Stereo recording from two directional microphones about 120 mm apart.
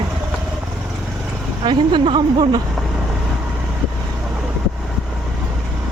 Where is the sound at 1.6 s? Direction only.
40° right (ahead or behind).